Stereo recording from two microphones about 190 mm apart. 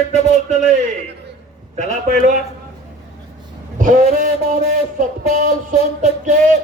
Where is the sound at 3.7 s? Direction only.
40° right (ahead or behind).